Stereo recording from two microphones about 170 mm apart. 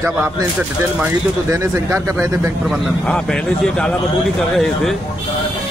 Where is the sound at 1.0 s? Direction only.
15° right (ahead or behind).